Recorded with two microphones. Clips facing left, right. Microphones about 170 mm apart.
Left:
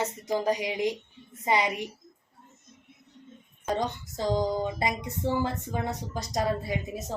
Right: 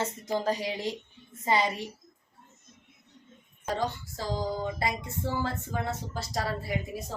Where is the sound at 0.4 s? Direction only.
15° left (ahead or behind).